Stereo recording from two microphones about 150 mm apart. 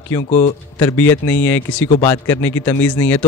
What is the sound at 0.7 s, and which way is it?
A man's voice, 15° left (ahead or behind).